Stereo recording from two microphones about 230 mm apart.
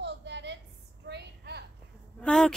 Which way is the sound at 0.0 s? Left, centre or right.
Right.